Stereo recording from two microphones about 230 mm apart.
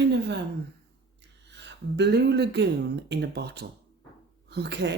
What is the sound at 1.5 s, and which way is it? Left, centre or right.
Speech, right.